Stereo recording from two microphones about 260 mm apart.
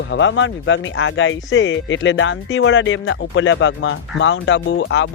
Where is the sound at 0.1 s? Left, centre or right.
Left.